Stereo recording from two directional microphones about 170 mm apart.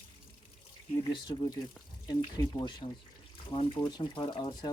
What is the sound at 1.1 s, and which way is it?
Speech, 25° left (ahead or behind).